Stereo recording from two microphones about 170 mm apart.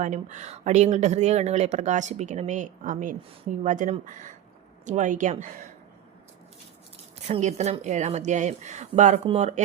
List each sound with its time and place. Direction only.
0.0 s a woman's voice: 45° right (ahead or behind)
7.3 s a woman's voice: 40° right (ahead or behind)